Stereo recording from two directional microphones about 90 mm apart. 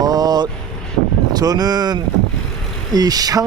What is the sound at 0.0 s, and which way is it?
Vehicle, 45° right (ahead or behind).